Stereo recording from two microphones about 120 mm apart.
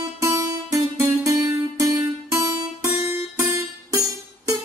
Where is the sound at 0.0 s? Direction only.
25° right (ahead or behind).